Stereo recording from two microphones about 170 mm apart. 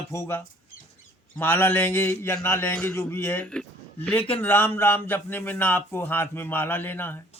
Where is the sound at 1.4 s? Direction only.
10° left (ahead or behind).